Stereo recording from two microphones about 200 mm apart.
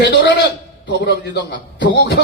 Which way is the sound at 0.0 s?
60° left (ahead or behind).